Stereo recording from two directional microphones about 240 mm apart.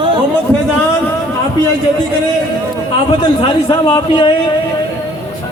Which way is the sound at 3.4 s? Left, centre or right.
Left.